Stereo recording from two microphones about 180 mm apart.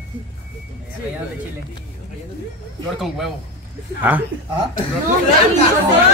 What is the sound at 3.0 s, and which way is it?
Speech, centre (ahead or behind).